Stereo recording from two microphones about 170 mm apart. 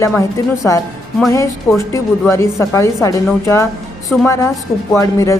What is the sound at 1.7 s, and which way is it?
A woman's voice, 15° left (ahead or behind).